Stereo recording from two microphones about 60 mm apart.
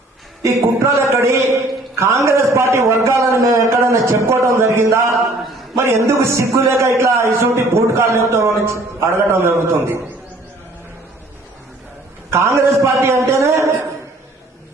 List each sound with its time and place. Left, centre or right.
0.4 s a sound: right
1.1 s a man's voice: right
12.3 s a man's voice: right